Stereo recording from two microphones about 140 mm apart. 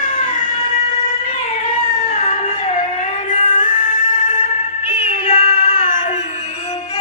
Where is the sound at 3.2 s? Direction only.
65° left (ahead or behind).